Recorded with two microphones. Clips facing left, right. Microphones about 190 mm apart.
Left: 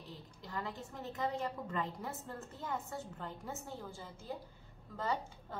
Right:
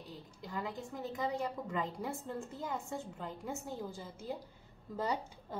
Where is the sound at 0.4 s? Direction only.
10° right (ahead or behind).